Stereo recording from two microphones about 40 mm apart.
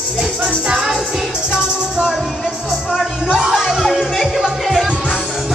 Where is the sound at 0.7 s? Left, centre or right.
Centre.